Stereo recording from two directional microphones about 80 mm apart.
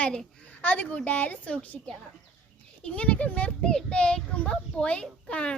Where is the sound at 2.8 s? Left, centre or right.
Centre.